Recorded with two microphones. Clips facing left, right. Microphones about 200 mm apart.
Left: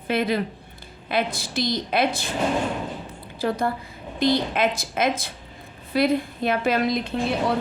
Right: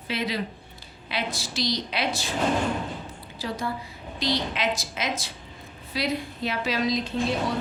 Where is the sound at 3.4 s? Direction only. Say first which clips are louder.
Left 6 dB; 55° left (ahead or behind).